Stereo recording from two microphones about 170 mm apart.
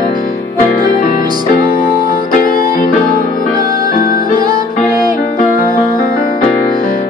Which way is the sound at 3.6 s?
60° left (ahead or behind).